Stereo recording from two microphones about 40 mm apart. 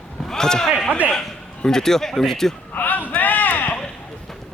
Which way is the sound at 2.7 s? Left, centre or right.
Left.